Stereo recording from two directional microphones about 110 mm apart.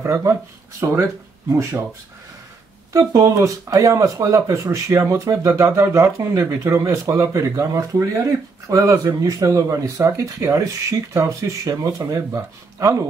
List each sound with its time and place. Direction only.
0.0 s speech: 25° right (ahead or behind)
2.9 s speech: 30° right (ahead or behind)